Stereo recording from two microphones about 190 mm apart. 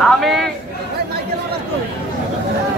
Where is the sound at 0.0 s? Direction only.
Centre (ahead or behind).